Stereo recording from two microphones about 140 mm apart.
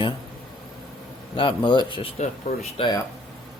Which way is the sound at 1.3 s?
35° left (ahead or behind).